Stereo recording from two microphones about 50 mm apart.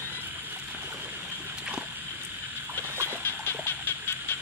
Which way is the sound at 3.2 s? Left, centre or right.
Left.